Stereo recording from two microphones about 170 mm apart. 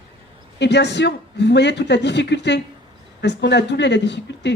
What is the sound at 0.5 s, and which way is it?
Speech, 90° left.